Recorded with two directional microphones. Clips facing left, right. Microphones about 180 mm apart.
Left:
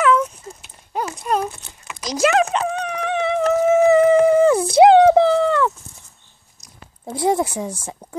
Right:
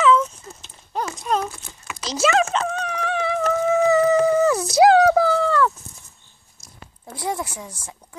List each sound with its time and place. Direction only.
0.0 s dog: 10° left (ahead or behind)
2.0 s speech: 15° left (ahead or behind)
2.5 s dog: 10° left (ahead or behind)
4.3 s a sound: 30° left (ahead or behind)
7.2 s speech: 25° left (ahead or behind)